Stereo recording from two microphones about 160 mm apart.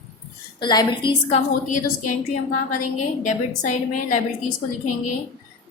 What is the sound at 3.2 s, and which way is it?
Speech, 50° left (ahead or behind).